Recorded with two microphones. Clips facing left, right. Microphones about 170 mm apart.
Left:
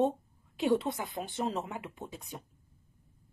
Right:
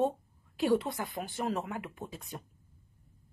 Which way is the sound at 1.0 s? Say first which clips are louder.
Left 1 dB; centre (ahead or behind).